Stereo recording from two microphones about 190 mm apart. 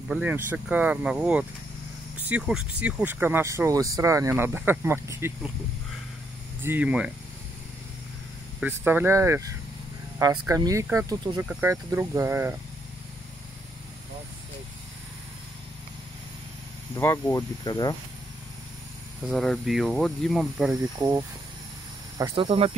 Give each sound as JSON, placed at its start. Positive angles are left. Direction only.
{"t": 0.1, "sound": "speech", "side_deg": -10}
{"t": 6.6, "sound": "speech", "side_deg": -10}
{"t": 8.5, "sound": "speech", "side_deg": -10}
{"t": 16.9, "sound": "speech", "side_deg": 15}
{"t": 19.2, "sound": "speech", "side_deg": 0}
{"t": 20.7, "sound": "speech", "side_deg": -15}
{"t": 22.2, "sound": "speech", "side_deg": -25}